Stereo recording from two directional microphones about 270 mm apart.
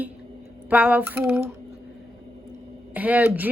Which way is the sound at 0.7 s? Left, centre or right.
Centre.